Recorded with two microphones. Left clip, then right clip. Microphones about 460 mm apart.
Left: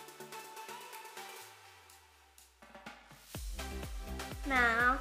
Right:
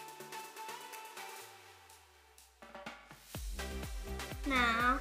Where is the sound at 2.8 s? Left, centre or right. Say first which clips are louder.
Right 2 dB; centre.